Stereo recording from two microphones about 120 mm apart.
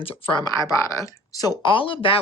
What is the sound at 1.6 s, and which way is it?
Speech, 45° left (ahead or behind).